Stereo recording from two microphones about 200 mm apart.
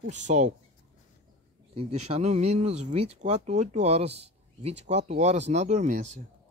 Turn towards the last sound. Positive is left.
turn(degrees=-35)  # may be behind; listen again after turning